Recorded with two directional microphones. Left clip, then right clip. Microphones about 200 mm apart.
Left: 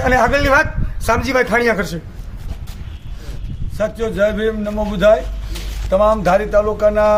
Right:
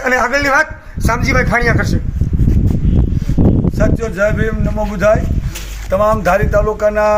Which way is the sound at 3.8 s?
5° left (ahead or behind).